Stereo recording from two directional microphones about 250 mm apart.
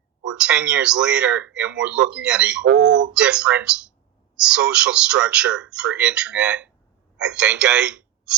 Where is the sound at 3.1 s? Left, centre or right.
Centre.